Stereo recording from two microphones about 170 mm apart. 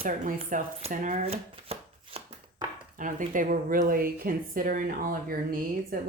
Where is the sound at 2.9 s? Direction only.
50° right (ahead or behind).